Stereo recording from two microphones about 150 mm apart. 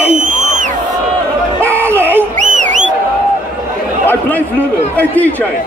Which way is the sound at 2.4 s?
55° right (ahead or behind).